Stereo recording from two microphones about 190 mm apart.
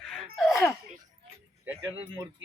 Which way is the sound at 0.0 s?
5° left (ahead or behind).